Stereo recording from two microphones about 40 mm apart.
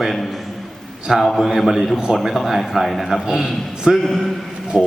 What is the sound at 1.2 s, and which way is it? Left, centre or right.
A man's voice, centre.